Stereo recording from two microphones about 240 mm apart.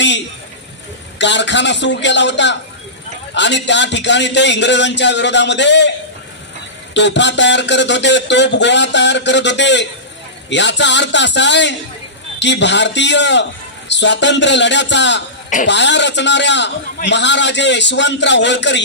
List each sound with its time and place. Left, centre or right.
1.2 s speech: left
6.9 s speech: left